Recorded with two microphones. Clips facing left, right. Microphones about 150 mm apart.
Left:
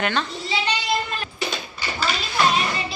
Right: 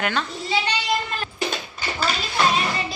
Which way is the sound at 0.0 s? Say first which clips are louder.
Left 1 dB; 5° right (ahead or behind).